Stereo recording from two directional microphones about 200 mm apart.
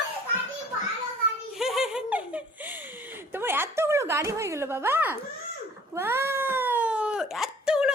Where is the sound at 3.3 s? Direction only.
10° right (ahead or behind).